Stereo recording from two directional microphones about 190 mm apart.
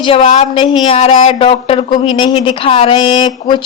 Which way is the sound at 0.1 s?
30° left (ahead or behind).